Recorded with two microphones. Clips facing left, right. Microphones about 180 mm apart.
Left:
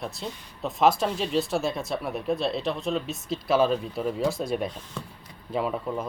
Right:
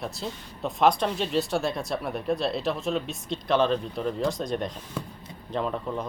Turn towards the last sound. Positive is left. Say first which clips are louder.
# left 1 dB
turn(degrees=5)  # may be behind; listen again after turning